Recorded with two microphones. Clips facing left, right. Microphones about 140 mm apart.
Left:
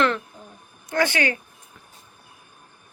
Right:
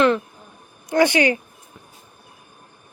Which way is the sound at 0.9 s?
15° right (ahead or behind).